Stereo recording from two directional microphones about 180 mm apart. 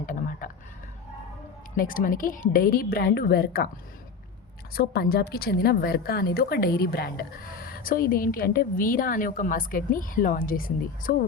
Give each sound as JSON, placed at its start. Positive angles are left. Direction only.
{"t": 0.0, "sound": "a sound", "side_deg": 50}
{"t": 1.7, "sound": "a woman's voice", "side_deg": 50}
{"t": 4.7, "sound": "a woman's voice", "side_deg": 60}